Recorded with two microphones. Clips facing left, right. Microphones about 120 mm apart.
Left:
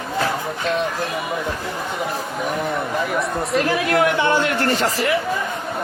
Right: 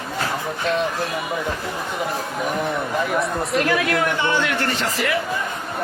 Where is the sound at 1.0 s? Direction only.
Centre (ahead or behind).